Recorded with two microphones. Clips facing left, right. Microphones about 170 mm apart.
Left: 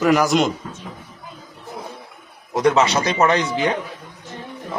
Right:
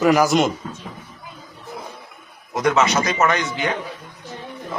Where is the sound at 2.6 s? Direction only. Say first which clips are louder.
Left 1 dB; 30° left (ahead or behind).